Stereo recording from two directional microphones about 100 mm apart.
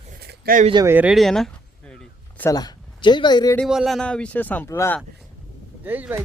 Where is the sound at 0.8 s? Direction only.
45° right (ahead or behind).